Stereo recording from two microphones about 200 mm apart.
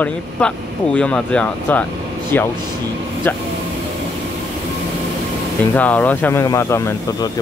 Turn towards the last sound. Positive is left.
turn(degrees=15)  # may be behind; listen again after turning